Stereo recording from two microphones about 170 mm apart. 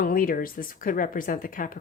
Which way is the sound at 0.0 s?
55° left (ahead or behind).